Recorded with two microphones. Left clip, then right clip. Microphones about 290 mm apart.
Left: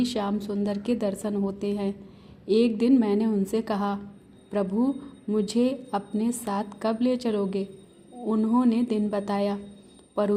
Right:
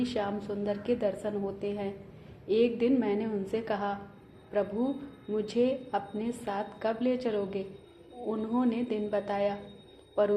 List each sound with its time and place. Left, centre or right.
0.0 s a woman's voice: left
5.3 s a woman's voice: left